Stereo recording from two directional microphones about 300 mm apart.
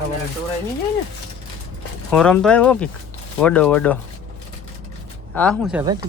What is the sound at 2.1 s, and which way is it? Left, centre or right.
Speech, centre.